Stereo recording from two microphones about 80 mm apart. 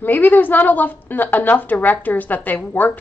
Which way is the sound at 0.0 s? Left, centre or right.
Left.